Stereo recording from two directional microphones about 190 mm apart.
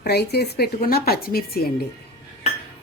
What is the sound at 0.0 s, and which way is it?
A woman's voice, 60° left (ahead or behind).